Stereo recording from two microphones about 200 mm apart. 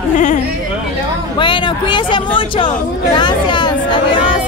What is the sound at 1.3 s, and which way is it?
Speech, 25° left (ahead or behind).